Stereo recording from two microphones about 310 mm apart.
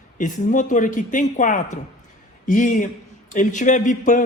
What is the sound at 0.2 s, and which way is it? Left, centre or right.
Speech, left.